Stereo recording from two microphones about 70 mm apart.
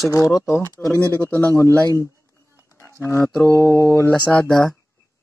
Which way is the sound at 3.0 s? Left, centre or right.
Left.